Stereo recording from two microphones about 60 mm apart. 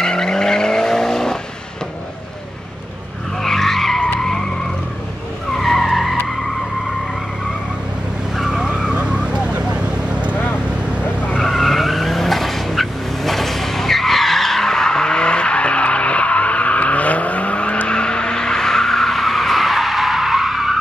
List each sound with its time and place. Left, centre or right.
0.0 s vehicle: centre
3.4 s skidding: centre
5.5 s vehicle: centre
8.4 s vehicle: centre
10.3 s vehicle: left
11.3 s vehicle: centre